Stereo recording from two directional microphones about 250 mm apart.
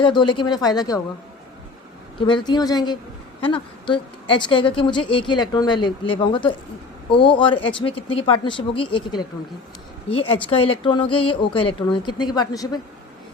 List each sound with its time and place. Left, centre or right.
0.0 s speech: centre
2.2 s speech: centre